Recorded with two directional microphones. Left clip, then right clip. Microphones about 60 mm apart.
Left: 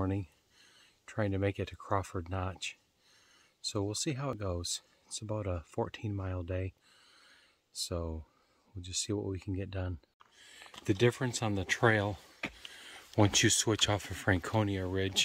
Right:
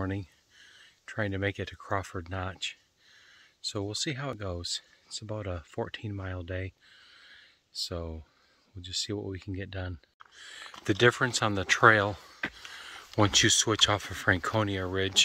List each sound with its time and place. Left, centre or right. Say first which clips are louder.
0.0 s a sound: right 1 dB; left
1.9 s speech: right 1 dB; left
6.1 s speech: right 1 dB; centre
7.9 s speech: right 1 dB; left
12.5 s a sound: right 5 dB; left
13.2 s speech: right 4 dB; left
14.7 s speech: right 4 dB; centre